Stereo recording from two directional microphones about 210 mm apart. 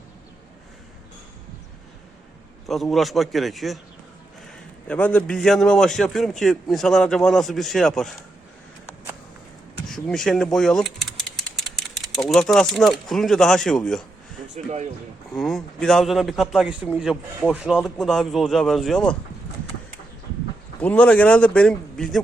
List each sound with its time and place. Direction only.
2.6 s a man's voice: centre (ahead or behind)
4.9 s a man's voice: 5° left (ahead or behind)
9.9 s speech: centre (ahead or behind)
14.5 s speech: 35° right (ahead or behind)
15.3 s a man's voice: centre (ahead or behind)
20.8 s a man's voice: 5° left (ahead or behind)